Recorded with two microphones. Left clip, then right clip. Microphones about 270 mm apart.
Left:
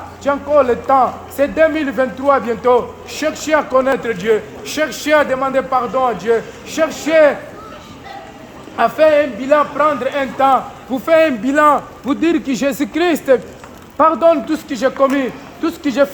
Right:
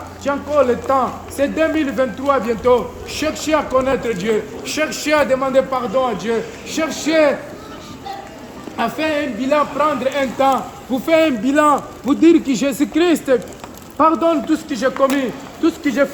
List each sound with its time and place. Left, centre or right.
0.3 s a man's voice: centre
8.7 s a man's voice: centre